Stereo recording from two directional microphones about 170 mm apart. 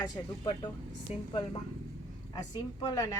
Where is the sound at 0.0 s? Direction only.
25° left (ahead or behind).